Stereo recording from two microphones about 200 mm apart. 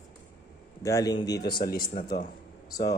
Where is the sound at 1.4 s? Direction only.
50° left (ahead or behind).